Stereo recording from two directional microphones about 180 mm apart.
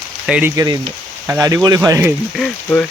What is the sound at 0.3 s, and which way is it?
Speech, 5° right (ahead or behind).